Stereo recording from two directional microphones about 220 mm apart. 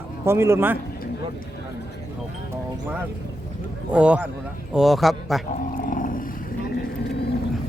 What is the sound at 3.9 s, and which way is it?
A man's voice, 5° right (ahead or behind).